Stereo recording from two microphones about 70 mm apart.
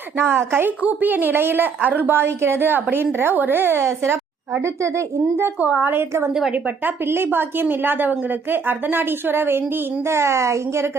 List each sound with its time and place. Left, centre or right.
0.2 s a woman's voice: right
0.8 s a woman's voice: right
5.8 s a woman's voice: right
6.5 s a woman's voice: right
7.0 s a woman's voice: right